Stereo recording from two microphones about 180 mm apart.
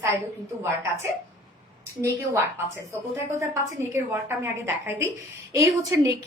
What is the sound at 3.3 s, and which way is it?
A woman's voice, 15° right (ahead or behind).